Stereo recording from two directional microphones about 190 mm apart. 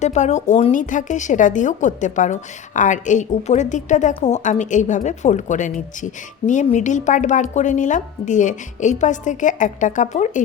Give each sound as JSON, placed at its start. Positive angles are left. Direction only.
{"t": 0.0, "sound": "a woman's voice", "side_deg": 35}